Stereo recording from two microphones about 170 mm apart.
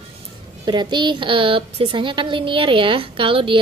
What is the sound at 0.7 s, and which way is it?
A woman's voice, 25° right (ahead or behind).